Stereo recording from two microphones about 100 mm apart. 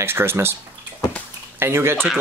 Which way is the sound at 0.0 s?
25° right (ahead or behind).